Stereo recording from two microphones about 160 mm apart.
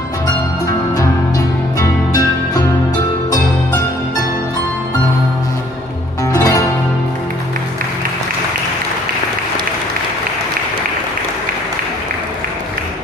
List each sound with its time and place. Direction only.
1.8 s music: 25° left (ahead or behind)
6.3 s music: 20° left (ahead or behind)